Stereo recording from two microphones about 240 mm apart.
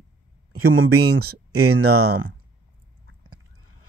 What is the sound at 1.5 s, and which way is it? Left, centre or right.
Speech, right.